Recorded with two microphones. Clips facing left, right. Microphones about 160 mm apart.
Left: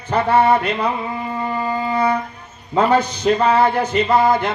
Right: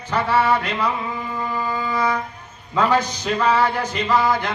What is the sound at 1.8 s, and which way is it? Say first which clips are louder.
Music: left 4 dB; 30° left (ahead or behind).